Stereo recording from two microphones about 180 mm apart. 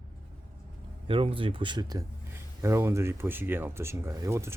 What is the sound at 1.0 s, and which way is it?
Speech, 30° right (ahead or behind).